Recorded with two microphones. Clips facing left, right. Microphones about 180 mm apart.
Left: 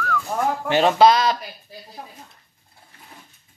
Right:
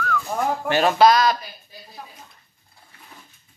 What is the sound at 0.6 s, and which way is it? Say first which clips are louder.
Speech: left 1 dB; 25° left (ahead or behind).